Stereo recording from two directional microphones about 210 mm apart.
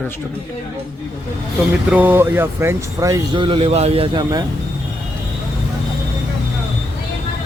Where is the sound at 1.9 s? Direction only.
10° right (ahead or behind).